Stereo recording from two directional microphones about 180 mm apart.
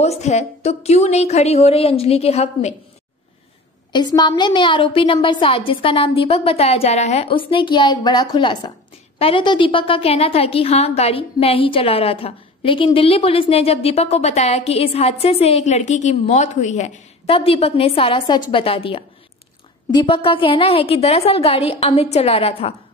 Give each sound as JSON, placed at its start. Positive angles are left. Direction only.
{"t": 0.0, "sound": "a woman's voice", "side_deg": 35}
{"t": 3.9, "sound": "a woman's voice", "side_deg": 20}